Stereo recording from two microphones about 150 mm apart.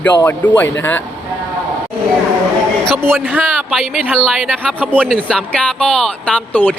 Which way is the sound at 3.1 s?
10° right (ahead or behind).